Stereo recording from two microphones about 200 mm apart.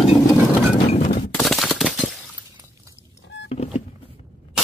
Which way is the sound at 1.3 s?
Centre (ahead or behind).